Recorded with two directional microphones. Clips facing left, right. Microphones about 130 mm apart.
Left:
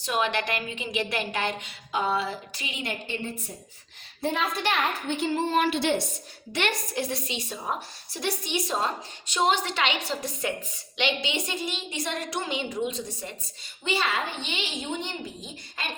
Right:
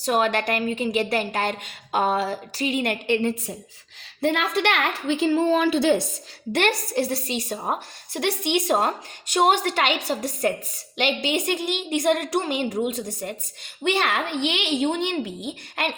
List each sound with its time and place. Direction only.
0.0 s a woman's voice: 45° right (ahead or behind); by 5.3 s 90° right
6.5 s a woman's voice: 45° right (ahead or behind); by 15.9 s 65° right (ahead or behind)